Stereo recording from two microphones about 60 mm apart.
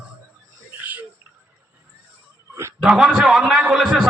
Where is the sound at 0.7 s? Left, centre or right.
Right.